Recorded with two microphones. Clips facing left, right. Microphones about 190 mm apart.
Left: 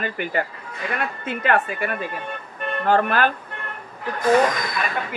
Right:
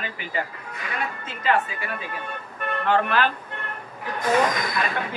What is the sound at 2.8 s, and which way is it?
Speech, 45° left (ahead or behind).